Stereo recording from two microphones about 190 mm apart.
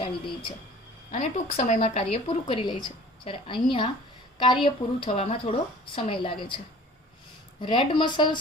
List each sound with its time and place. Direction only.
1.1 s speech: 40° left (ahead or behind); by 6.6 s 25° left (ahead or behind)
7.6 s speech: 25° left (ahead or behind)